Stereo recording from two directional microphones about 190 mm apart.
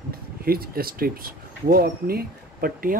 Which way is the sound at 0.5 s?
50° right (ahead or behind).